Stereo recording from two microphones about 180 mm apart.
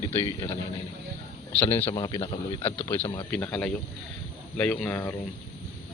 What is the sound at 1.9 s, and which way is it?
Speech, 25° left (ahead or behind).